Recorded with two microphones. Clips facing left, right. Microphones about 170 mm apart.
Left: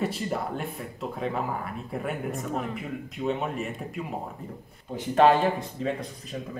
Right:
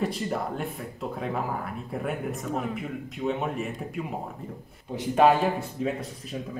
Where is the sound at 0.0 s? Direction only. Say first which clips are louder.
Even; centre (ahead or behind).